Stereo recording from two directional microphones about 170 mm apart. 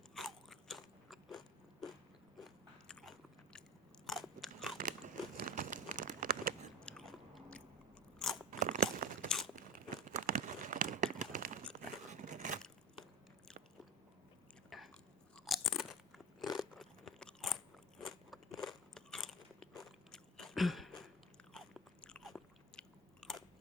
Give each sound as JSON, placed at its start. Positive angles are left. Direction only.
{"t": 0.1, "sound": "crunch", "side_deg": 0}
{"t": 2.4, "sound": "biting", "side_deg": 5}
{"t": 4.8, "sound": "a sound", "side_deg": -50}
{"t": 6.7, "sound": "biting", "side_deg": 5}
{"t": 8.4, "sound": "crunch", "side_deg": -45}
{"t": 9.6, "sound": "crumpling", "side_deg": -50}
{"t": 12.0, "sound": "scrape", "side_deg": -45}
{"t": 14.7, "sound": "biting", "side_deg": 0}
{"t": 15.4, "sound": "crunch", "side_deg": 0}
{"t": 21.5, "sound": "biting", "side_deg": 0}